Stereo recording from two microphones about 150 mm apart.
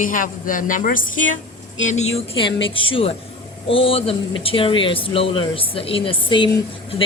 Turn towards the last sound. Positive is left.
turn(degrees=35)  # may be behind; listen again after turning